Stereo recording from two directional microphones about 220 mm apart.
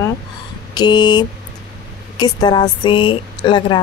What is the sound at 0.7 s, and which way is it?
A woman's voice, 20° left (ahead or behind).